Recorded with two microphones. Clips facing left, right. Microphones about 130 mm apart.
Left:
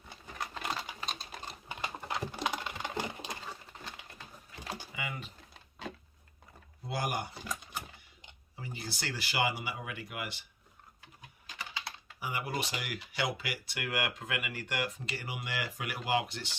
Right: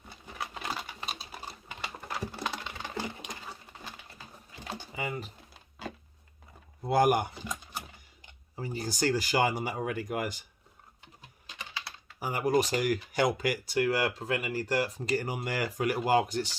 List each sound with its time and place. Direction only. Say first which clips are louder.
0.3 s computer keyboard: right 1 dB; 10° right (ahead or behind)
2.2 s typing: even; 15° left (ahead or behind)
4.9 s speech: right 5 dB; 35° right (ahead or behind)
5.8 s a sound: right 2 dB; centre (ahead or behind)
6.8 s speech: right 11 dB; 55° right (ahead or behind)
8.5 s speech: right 8 dB; 40° right (ahead or behind)
12.2 s speech: right 9 dB; 45° right (ahead or behind)